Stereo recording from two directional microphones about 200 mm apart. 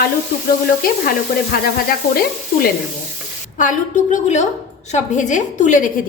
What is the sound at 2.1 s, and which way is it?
A woman's voice, 50° left (ahead or behind).